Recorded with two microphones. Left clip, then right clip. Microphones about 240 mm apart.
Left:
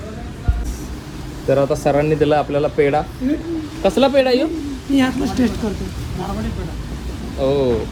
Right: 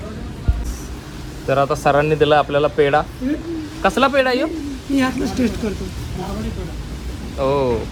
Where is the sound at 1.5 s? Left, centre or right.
Centre.